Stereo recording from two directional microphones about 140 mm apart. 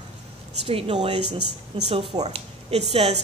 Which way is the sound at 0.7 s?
45° right (ahead or behind).